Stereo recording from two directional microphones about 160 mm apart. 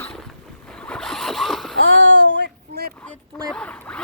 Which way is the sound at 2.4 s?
85° right.